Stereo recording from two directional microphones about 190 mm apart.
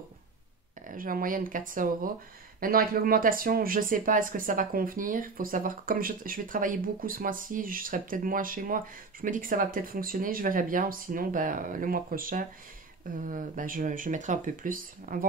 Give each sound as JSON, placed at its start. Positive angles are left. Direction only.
{"t": 0.8, "sound": "speech", "side_deg": -45}